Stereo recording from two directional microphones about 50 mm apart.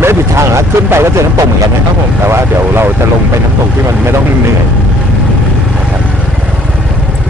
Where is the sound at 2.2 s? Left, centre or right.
Right.